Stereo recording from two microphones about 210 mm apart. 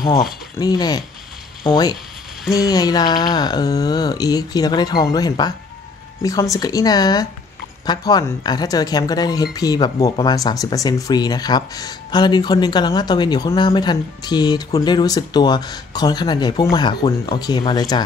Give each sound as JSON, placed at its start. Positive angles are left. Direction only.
{"t": 0.6, "sound": "speech", "side_deg": 20}